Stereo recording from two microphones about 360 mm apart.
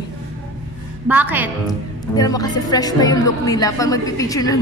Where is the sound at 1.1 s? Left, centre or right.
Centre.